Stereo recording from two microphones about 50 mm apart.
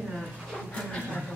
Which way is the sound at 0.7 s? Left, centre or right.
Centre.